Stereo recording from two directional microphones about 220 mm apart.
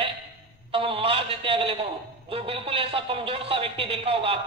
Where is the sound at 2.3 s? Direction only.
25° right (ahead or behind).